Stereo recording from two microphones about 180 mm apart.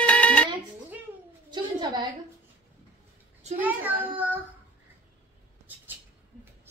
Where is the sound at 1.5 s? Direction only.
25° right (ahead or behind).